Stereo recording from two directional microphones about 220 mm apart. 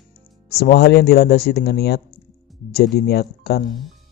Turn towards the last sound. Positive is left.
turn(degrees=45)  # may be behind; listen again after turning